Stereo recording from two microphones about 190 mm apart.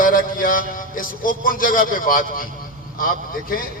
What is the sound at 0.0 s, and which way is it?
A man's voice, 45° left (ahead or behind).